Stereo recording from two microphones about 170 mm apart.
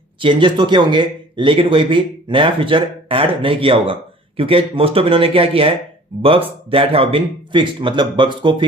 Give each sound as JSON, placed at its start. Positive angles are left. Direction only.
{"t": 0.2, "sound": "a man's voice", "side_deg": -30}